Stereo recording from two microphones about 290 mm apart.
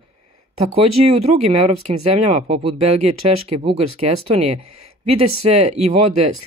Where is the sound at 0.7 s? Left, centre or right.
Right.